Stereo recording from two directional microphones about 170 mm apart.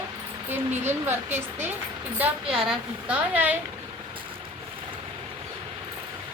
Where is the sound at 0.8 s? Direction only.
15° right (ahead or behind).